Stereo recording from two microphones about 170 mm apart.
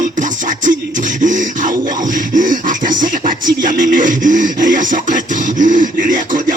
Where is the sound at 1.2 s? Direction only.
50° right (ahead or behind).